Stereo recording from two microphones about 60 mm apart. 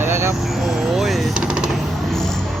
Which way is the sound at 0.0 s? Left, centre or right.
Right.